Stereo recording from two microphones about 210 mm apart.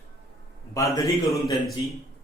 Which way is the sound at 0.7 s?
15° left (ahead or behind).